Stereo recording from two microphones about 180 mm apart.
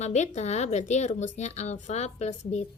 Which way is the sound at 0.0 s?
40° left (ahead or behind).